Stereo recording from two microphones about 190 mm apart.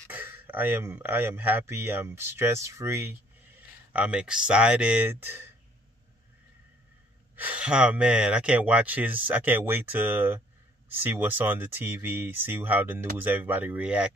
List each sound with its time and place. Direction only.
0.1 s speech: 10° right (ahead or behind)
7.3 s speech: 10° right (ahead or behind)